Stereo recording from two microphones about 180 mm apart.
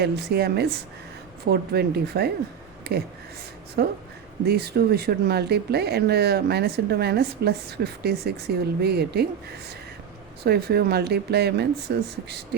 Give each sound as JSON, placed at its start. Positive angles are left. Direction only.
{"t": 0.0, "sound": "speech", "side_deg": -65}